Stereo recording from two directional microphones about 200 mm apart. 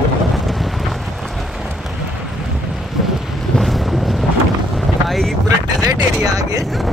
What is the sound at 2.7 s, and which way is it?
Boat, centre (ahead or behind).